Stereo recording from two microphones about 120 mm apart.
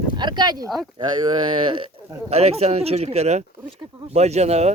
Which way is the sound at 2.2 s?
60° right (ahead or behind).